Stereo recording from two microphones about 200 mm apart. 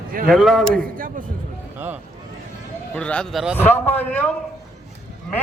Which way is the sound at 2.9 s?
5° left (ahead or behind).